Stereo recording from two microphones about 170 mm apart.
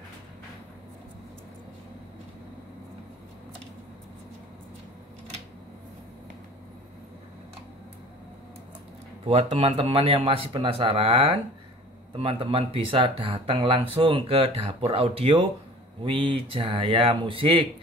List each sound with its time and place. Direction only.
9.2 s speech: 35° right (ahead or behind)